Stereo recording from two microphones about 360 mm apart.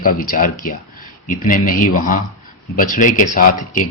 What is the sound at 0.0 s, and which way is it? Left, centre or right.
Speech, left.